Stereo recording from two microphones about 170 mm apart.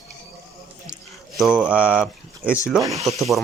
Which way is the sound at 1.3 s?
5° right (ahead or behind).